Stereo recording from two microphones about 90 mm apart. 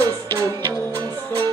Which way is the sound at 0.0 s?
30° right (ahead or behind).